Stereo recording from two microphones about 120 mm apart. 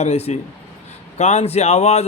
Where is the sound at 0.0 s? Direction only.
65° left (ahead or behind).